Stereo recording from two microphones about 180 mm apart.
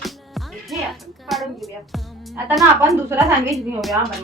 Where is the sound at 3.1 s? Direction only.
15° right (ahead or behind).